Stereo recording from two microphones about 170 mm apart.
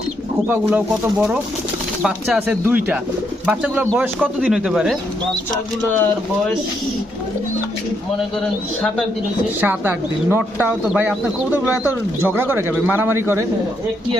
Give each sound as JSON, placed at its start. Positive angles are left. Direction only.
{"t": 0.7, "sound": "speech", "side_deg": -10}
{"t": 9.6, "sound": "speech", "side_deg": -10}